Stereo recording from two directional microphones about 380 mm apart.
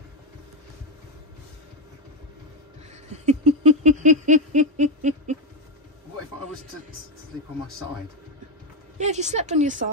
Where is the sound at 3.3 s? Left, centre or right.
Centre.